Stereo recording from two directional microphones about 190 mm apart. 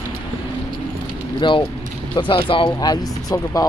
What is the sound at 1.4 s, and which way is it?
Speech, 25° left (ahead or behind).